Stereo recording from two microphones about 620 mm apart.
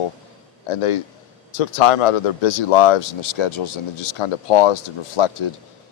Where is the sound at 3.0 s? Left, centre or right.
Left.